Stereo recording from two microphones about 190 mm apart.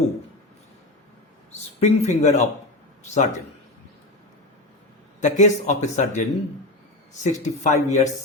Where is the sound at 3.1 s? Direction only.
40° left (ahead or behind).